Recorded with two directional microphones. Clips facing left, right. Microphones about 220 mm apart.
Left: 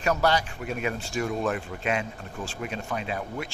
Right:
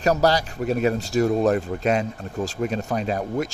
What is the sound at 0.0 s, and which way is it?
Speech, 35° right (ahead or behind).